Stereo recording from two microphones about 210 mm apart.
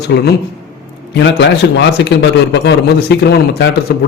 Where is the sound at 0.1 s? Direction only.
50° left (ahead or behind).